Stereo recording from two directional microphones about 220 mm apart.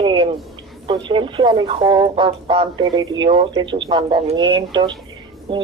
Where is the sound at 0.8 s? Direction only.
20° right (ahead or behind).